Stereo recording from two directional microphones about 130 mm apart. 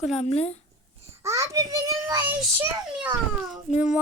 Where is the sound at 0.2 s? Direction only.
55° left (ahead or behind).